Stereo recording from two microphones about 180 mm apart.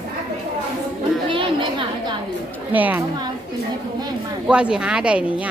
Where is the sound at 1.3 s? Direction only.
30° right (ahead or behind).